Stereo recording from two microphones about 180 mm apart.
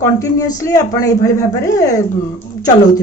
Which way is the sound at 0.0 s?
20° left (ahead or behind).